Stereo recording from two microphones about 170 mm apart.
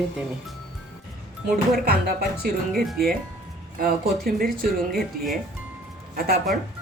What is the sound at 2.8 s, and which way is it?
Speech, centre (ahead or behind).